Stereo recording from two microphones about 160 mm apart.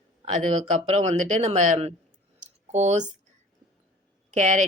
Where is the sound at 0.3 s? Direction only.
45° right (ahead or behind).